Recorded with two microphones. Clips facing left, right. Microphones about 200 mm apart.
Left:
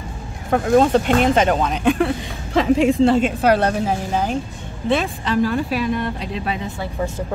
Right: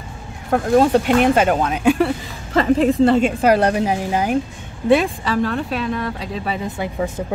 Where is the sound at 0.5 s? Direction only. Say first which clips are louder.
Even; centre (ahead or behind).